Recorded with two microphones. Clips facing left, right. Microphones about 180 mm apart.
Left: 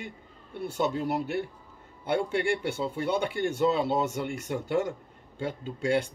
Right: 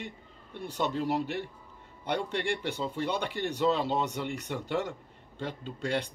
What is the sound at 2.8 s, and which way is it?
Speech, 5° left (ahead or behind).